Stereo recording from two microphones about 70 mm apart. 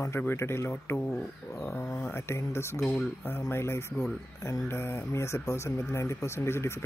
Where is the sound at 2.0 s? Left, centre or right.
Left.